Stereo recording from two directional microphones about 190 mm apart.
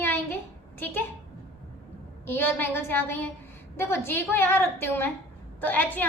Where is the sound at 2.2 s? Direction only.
10° left (ahead or behind).